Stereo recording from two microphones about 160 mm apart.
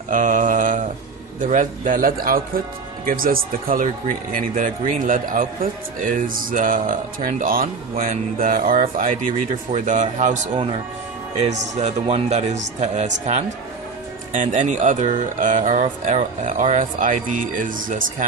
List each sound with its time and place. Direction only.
0.1 s mantra: 55° right (ahead or behind)
1.4 s speech: 55° right (ahead or behind)
11.7 s speech: 45° right (ahead or behind)